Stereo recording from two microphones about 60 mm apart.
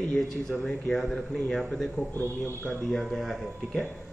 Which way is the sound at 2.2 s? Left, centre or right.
Right.